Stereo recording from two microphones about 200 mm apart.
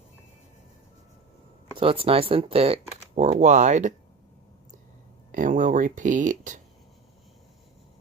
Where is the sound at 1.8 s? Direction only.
25° right (ahead or behind).